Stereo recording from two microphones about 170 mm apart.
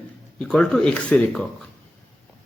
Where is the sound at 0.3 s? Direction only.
5° left (ahead or behind).